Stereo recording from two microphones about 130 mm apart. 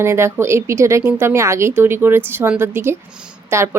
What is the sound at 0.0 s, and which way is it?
Speech, 20° right (ahead or behind).